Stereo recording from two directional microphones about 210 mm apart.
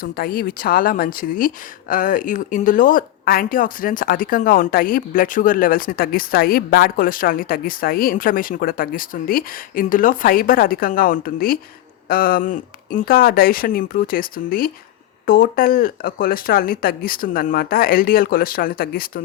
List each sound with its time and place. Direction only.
0.0 s speech: 45° left (ahead or behind)